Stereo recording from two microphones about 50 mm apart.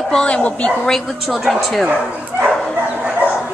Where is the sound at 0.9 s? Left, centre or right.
Centre.